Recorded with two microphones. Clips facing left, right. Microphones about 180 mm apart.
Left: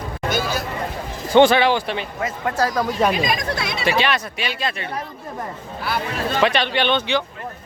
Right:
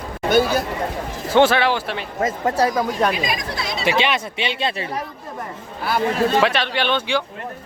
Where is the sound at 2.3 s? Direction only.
35° right (ahead or behind).